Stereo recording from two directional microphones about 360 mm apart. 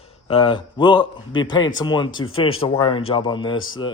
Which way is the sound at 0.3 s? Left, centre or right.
Centre.